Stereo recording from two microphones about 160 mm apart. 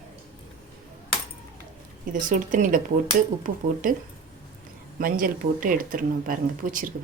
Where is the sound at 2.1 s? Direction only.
55° right (ahead or behind).